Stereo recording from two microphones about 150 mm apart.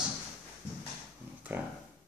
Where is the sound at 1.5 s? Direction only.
15° right (ahead or behind).